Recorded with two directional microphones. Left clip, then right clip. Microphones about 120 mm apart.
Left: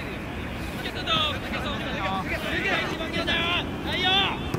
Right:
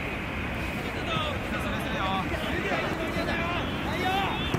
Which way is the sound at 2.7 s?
40° left (ahead or behind).